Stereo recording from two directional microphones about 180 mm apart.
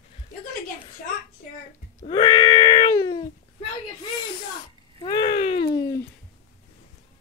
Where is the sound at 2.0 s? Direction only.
25° left (ahead or behind).